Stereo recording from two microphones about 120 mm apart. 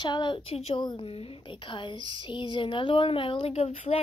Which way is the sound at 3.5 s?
65° left (ahead or behind).